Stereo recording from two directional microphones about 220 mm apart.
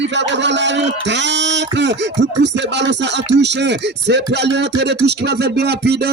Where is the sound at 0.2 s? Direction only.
55° right (ahead or behind).